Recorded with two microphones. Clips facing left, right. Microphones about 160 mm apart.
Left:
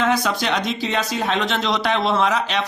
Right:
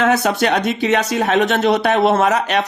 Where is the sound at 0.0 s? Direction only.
60° right (ahead or behind).